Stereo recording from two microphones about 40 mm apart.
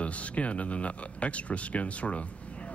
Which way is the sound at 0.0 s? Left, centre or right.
Left.